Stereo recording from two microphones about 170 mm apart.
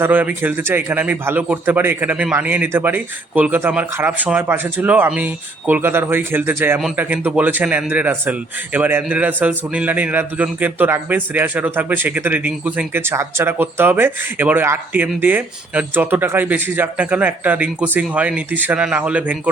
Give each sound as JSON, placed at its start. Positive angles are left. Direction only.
{"t": 0.0, "sound": "speech", "side_deg": -10}